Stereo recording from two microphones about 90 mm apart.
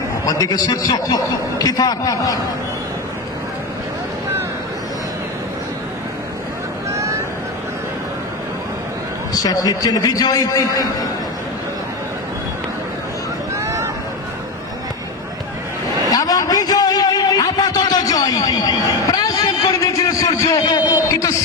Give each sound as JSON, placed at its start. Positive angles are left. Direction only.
{"t": 0.3, "sound": "a man's voice", "side_deg": 40}
{"t": 6.9, "sound": "vehicle", "side_deg": -35}
{"t": 9.3, "sound": "a man's voice", "side_deg": 40}
{"t": 13.6, "sound": "vehicle", "side_deg": -35}
{"t": 16.1, "sound": "a sound", "side_deg": 40}
{"t": 19.0, "sound": "vehicle", "side_deg": 45}
{"t": 19.7, "sound": "a sound", "side_deg": 35}